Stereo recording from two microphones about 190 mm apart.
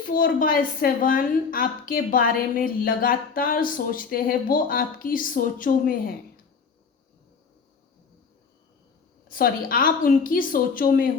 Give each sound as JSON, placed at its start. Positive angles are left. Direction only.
{"t": 0.0, "sound": "a woman's voice", "side_deg": 45}
{"t": 9.3, "sound": "a woman's voice", "side_deg": 50}